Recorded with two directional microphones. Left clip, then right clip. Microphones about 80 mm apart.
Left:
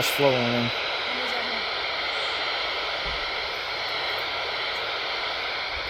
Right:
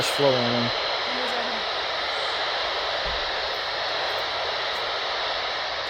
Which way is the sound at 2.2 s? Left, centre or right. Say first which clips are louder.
Right 1 dB; right.